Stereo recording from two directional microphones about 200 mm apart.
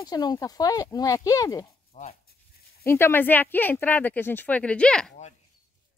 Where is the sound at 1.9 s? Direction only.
35° left (ahead or behind).